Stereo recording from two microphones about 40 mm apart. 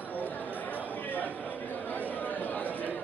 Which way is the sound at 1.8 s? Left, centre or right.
Left.